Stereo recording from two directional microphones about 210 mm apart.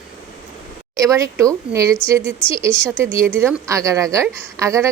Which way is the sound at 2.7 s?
20° left (ahead or behind).